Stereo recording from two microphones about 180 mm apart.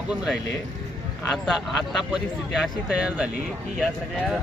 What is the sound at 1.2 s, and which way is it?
Speech, centre (ahead or behind).